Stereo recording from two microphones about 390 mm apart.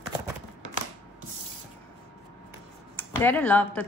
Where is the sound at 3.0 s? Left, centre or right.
Centre.